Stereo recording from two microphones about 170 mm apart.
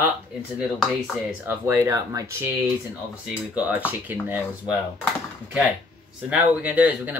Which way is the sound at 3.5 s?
10° right (ahead or behind).